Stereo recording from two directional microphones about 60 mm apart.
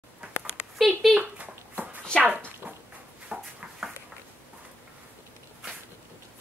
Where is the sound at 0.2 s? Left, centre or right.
Centre.